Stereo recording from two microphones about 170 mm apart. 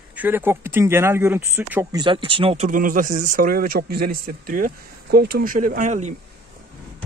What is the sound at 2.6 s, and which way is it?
A man's voice, 50° right (ahead or behind).